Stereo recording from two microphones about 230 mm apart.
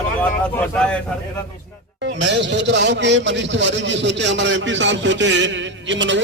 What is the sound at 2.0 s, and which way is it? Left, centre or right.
A man's voice, right.